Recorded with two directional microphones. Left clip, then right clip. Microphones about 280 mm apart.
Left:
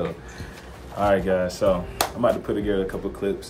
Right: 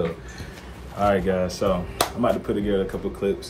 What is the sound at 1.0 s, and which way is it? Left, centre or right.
Speech, centre.